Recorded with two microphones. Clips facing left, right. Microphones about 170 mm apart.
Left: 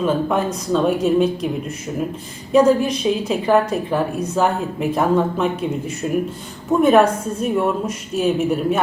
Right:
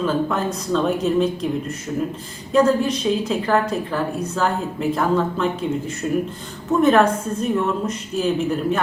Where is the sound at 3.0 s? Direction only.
15° left (ahead or behind).